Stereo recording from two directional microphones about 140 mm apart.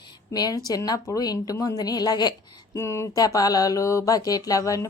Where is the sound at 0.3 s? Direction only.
25° left (ahead or behind).